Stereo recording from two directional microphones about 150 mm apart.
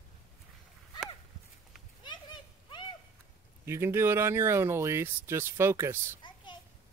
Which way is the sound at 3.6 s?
15° right (ahead or behind).